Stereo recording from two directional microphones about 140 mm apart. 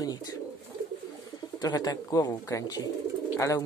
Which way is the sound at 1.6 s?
25° left (ahead or behind).